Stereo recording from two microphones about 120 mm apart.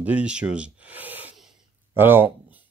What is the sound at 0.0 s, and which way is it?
Speech, 10° right (ahead or behind).